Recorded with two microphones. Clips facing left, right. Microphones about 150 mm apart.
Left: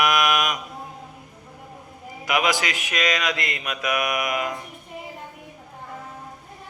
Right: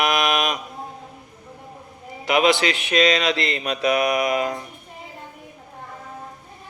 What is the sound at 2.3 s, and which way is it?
Speech, 25° right (ahead or behind).